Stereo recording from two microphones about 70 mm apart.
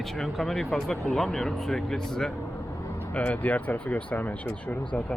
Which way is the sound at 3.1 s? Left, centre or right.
Left.